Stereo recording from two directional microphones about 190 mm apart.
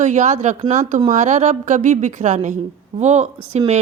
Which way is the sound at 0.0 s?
40° right (ahead or behind).